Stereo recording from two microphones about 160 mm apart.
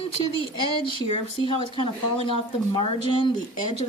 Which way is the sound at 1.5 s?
30° left (ahead or behind).